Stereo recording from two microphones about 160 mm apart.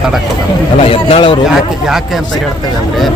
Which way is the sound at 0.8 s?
35° left (ahead or behind).